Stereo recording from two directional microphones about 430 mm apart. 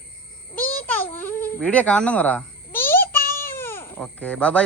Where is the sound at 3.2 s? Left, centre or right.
Centre.